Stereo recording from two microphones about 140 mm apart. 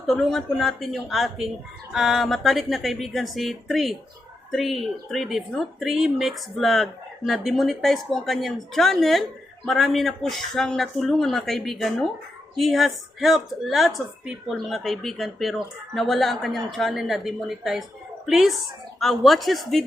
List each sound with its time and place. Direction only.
0.1 s a woman's voice: centre (ahead or behind)